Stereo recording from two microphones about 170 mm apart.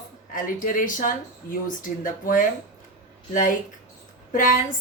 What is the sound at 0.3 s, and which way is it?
Speech, 50° left (ahead or behind).